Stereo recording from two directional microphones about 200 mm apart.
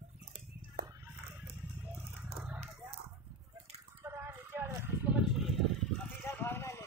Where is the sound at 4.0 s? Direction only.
15° right (ahead or behind).